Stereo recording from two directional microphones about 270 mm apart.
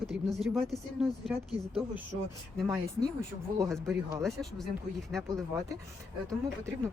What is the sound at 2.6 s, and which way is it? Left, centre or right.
Speech, centre.